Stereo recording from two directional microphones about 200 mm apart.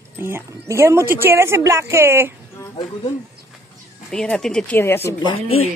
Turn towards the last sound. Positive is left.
turn(degrees=25)  # may be behind; listen again after turning